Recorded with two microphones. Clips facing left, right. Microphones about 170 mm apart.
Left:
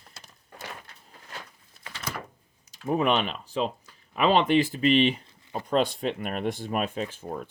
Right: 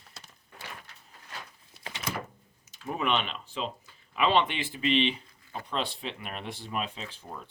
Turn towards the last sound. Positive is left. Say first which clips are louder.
# left 9 dB
turn(degrees=45)  # may be behind; listen again after turning